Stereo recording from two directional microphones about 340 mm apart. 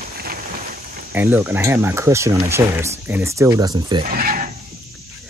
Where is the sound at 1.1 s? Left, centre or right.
Centre.